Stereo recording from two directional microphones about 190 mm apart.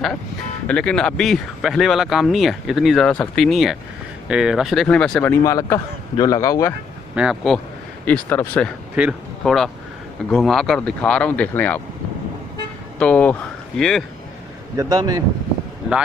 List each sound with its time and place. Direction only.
0.7 s speech: 5° left (ahead or behind)
7.2 s speech: centre (ahead or behind)
8.0 s a man's voice: 10° left (ahead or behind)
13.0 s speech: 10° left (ahead or behind)
14.8 s speech: 20° right (ahead or behind)